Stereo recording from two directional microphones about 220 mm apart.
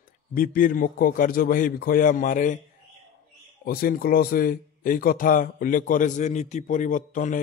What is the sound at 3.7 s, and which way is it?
Speech, 40° left (ahead or behind).